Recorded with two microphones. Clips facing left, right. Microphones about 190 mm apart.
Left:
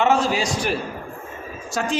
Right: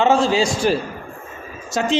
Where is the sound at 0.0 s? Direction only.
25° right (ahead or behind).